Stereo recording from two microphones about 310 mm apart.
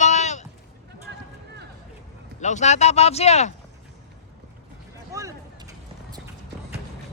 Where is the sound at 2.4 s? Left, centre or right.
Left.